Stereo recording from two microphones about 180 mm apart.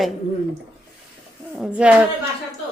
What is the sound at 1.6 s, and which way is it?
Speech, 5° right (ahead or behind).